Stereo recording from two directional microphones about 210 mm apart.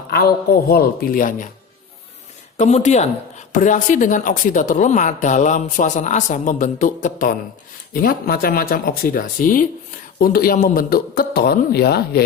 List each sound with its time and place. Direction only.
0.1 s a man's voice: 45° left (ahead or behind)
2.6 s a man's voice: 35° left (ahead or behind); by 12.2 s 50° left (ahead or behind)